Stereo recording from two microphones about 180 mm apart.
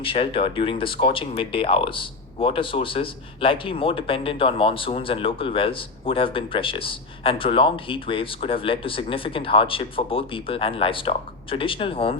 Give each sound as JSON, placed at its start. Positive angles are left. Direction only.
{"t": 0.0, "sound": "speech", "side_deg": 30}